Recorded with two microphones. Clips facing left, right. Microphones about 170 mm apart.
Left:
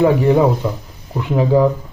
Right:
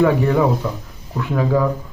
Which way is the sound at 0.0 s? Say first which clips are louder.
Left 3 dB; 20° left (ahead or behind).